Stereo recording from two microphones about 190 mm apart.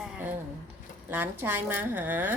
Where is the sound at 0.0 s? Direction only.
10° right (ahead or behind).